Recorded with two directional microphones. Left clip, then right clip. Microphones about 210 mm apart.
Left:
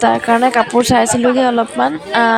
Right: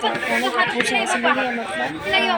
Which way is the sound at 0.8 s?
40° left (ahead or behind).